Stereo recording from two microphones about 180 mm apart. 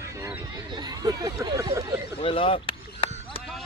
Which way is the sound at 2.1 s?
30° left (ahead or behind).